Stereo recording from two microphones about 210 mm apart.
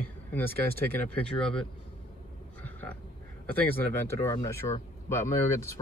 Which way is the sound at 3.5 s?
10° left (ahead or behind).